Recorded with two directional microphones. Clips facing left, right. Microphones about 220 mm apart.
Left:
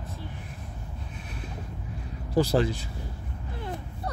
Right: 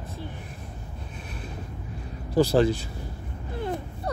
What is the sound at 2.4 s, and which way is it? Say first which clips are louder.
Speech: right 4 dB; 30° right (ahead or behind).